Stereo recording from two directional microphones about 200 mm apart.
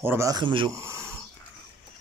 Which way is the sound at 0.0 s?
10° right (ahead or behind).